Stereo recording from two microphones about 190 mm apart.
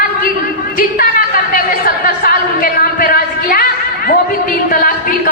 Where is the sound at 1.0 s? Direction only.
50° left (ahead or behind).